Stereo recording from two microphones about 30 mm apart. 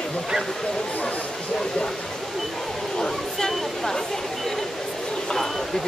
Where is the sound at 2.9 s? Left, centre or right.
Left.